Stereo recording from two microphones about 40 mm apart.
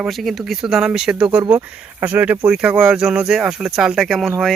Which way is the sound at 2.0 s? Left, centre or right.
Right.